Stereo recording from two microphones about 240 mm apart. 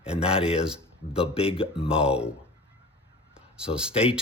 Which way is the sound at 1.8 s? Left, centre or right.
Centre.